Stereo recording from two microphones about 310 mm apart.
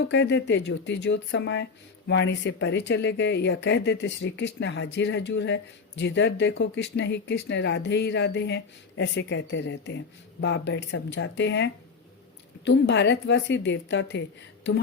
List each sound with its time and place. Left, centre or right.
0.0 s speech: left